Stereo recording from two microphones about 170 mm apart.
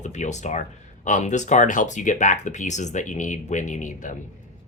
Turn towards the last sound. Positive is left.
turn(degrees=50)  # may be behind; listen again after turning